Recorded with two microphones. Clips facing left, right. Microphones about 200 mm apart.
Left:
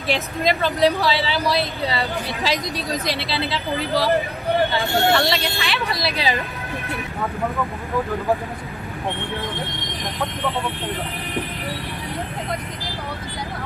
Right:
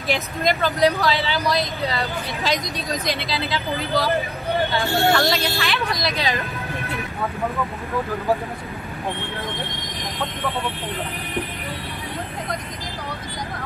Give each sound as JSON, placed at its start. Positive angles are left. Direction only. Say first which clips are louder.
{"t": 0.4, "sound": "speech", "louder": "even", "side_deg": 0}
{"t": 3.2, "sound": "speech", "louder": "left 1 dB", "side_deg": 30}
{"t": 3.4, "sound": "speech", "louder": "left 1 dB", "side_deg": 0}